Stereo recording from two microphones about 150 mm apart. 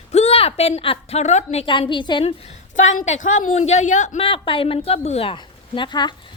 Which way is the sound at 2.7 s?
55° left (ahead or behind).